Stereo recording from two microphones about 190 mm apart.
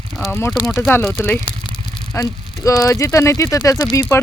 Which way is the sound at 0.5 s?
Centre (ahead or behind).